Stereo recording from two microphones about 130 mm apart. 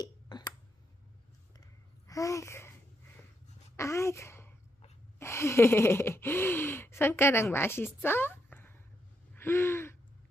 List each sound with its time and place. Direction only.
0.0 s a sound: 30° left (ahead or behind)
2.0 s speech: 25° left (ahead or behind)
3.8 s speech: 20° left (ahead or behind)
9.3 s gasp: 15° left (ahead or behind)